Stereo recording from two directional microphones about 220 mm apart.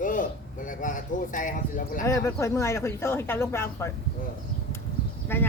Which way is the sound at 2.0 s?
15° left (ahead or behind).